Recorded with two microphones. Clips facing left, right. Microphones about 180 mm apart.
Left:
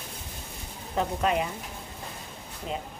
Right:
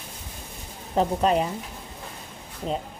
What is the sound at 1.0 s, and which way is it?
Speech, 35° right (ahead or behind).